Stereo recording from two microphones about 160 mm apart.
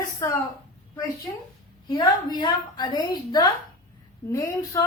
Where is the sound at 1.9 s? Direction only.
25° left (ahead or behind).